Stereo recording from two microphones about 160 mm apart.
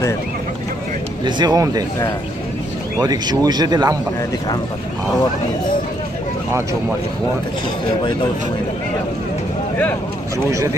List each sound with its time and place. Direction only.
1.2 s speech: 25° right (ahead or behind)
3.0 s speech: 25° right (ahead or behind)
10.5 s speech: 20° right (ahead or behind)